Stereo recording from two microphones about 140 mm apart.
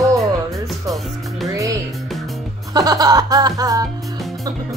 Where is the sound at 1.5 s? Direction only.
25° right (ahead or behind).